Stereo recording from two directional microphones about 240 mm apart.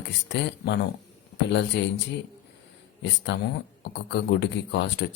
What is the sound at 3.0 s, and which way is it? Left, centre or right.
Speech, left.